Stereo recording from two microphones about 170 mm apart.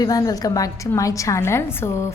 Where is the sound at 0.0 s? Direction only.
20° left (ahead or behind).